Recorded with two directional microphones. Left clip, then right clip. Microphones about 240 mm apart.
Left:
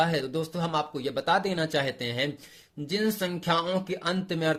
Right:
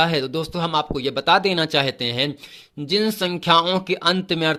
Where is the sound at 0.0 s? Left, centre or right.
Right.